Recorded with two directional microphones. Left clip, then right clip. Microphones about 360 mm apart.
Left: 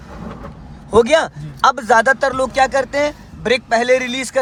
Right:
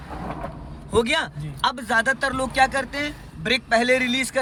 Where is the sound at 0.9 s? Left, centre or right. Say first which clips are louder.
Left 9 dB; centre.